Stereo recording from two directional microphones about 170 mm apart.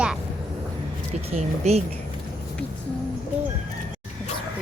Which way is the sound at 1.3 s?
40° right (ahead or behind).